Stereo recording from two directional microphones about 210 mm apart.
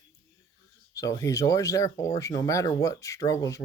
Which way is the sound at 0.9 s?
15° left (ahead or behind).